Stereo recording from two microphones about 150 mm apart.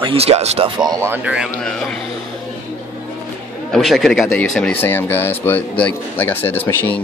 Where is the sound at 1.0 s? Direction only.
10° right (ahead or behind).